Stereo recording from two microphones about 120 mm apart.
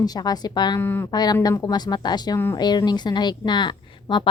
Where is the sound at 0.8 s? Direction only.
20° left (ahead or behind).